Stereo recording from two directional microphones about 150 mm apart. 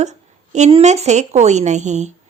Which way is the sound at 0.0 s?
50° right (ahead or behind).